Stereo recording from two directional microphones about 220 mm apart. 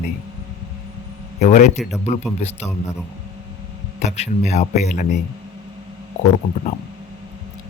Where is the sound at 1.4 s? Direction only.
35° left (ahead or behind).